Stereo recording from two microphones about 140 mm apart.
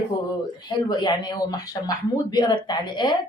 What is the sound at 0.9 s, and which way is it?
Speech, 30° left (ahead or behind).